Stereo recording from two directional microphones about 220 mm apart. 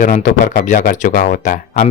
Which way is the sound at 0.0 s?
35° left (ahead or behind).